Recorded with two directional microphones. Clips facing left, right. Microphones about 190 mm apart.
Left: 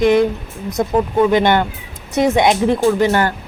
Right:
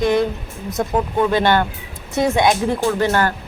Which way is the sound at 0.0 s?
20° left (ahead or behind).